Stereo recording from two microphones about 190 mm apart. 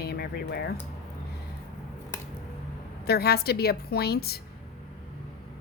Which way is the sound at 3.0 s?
55° left (ahead or behind).